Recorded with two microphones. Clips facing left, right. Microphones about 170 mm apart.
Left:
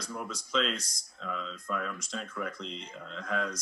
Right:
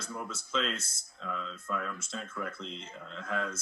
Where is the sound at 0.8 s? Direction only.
35° left (ahead or behind).